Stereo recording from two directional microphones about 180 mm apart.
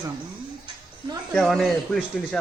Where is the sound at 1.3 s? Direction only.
Centre (ahead or behind).